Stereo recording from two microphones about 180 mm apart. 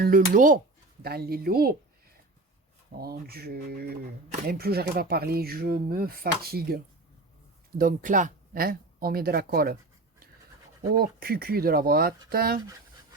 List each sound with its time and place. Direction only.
0.0 s speech: 50° right (ahead or behind)
1.0 s speech: 60° right (ahead or behind)
3.0 s speech: 60° right (ahead or behind)
7.8 s speech: 50° right (ahead or behind)
10.9 s speech: 55° right (ahead or behind)